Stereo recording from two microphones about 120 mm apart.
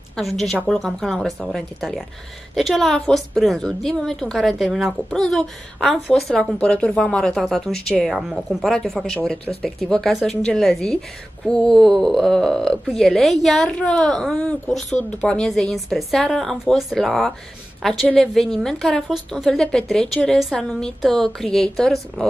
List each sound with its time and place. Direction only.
0.1 s a woman's voice: centre (ahead or behind)